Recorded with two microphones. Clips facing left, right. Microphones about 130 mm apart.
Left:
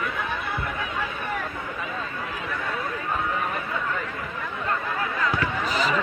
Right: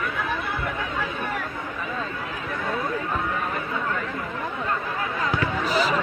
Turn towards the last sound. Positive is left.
turn(degrees=-40)  # may be behind; listen again after turning